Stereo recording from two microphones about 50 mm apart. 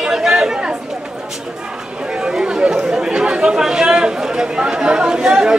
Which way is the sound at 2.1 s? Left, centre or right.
Centre.